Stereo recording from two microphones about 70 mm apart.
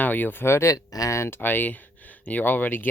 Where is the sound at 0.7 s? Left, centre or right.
Left.